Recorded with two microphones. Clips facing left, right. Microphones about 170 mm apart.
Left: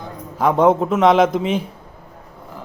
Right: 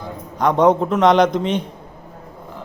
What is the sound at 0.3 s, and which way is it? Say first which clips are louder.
A man's voice: even; 5° left (ahead or behind).